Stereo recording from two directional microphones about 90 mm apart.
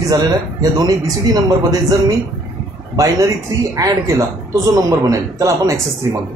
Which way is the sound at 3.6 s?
35° right (ahead or behind).